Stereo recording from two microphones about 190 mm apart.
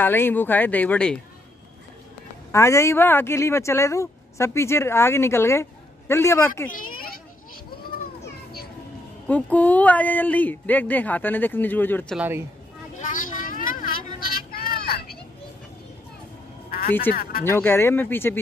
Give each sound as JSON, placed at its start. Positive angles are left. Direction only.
{"t": 0.0, "sound": "speech", "side_deg": 10}
{"t": 2.5, "sound": "speech", "side_deg": 15}
{"t": 6.7, "sound": "speech", "side_deg": 45}
{"t": 9.3, "sound": "speech", "side_deg": 10}
{"t": 12.2, "sound": "speech", "side_deg": -10}
{"t": 13.0, "sound": "vehicle", "side_deg": 45}
{"t": 17.1, "sound": "speech", "side_deg": 55}
{"t": 17.5, "sound": "speech", "side_deg": 10}